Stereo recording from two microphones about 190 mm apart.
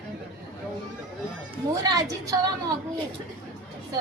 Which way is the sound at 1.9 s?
20° right (ahead or behind).